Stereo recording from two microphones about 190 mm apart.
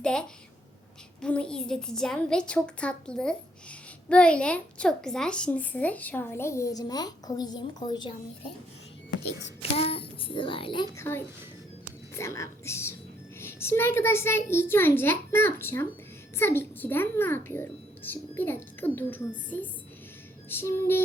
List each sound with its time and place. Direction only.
0.0 s a woman's voice: 5° left (ahead or behind); by 8.5 s 25° left (ahead or behind)
9.7 s a child's voice: 30° left (ahead or behind)
10.9 s a woman's voice: 15° left (ahead or behind)
20.5 s a woman's voice: 10° left (ahead or behind)